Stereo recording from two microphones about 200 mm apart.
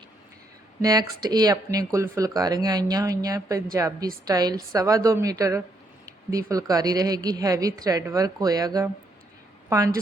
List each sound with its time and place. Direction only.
0.8 s a woman's voice: 20° right (ahead or behind)